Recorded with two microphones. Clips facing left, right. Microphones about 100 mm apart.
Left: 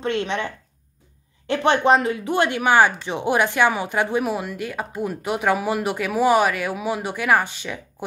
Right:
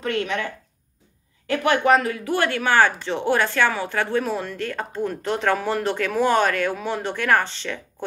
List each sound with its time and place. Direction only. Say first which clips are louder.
0.0 s a woman's voice: left 1 dB; 25° left (ahead or behind)
1.5 s speech: left 1 dB; 25° left (ahead or behind)